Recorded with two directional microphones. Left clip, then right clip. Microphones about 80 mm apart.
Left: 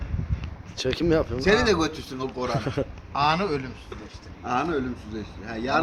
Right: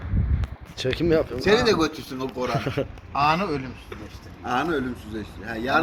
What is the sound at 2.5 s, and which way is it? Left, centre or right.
Speech, left.